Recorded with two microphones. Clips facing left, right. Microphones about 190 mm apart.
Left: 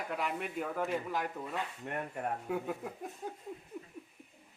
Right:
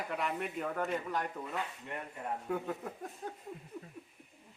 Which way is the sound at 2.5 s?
5° left (ahead or behind).